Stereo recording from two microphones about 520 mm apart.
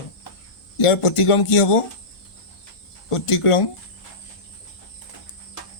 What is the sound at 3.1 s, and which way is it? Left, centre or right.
Speech, left.